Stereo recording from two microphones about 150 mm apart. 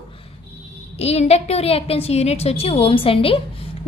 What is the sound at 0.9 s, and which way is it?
A woman's voice, 45° left (ahead or behind).